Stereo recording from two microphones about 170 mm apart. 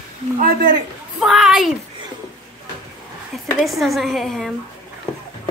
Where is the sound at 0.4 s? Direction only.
55° right (ahead or behind).